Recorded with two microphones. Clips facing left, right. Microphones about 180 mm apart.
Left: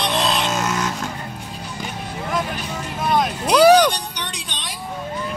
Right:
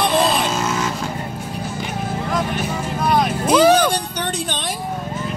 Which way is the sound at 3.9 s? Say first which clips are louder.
Right 7 dB; 50° right (ahead or behind).